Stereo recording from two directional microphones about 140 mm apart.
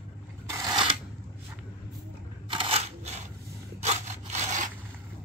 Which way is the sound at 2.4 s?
40° right (ahead or behind).